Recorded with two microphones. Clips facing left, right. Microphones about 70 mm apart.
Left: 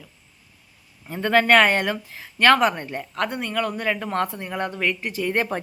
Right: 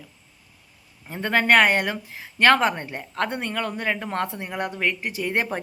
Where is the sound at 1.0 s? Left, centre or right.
Right.